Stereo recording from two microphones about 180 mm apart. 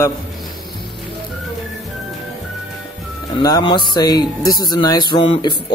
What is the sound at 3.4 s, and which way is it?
Speech, 25° left (ahead or behind).